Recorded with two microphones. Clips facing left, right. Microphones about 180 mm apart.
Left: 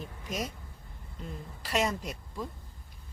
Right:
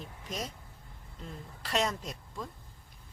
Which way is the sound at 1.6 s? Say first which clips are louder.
Left 2 dB; 5° left (ahead or behind).